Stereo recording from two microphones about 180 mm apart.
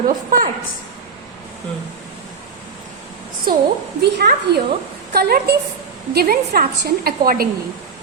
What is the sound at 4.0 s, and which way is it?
A woman's voice, 65° right (ahead or behind).